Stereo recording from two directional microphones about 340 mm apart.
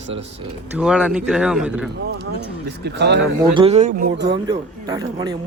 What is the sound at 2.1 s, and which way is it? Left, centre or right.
Speech, right.